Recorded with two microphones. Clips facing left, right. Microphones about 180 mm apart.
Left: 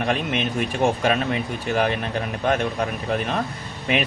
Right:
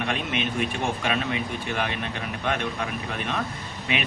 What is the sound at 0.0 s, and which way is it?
Speech, 40° left (ahead or behind).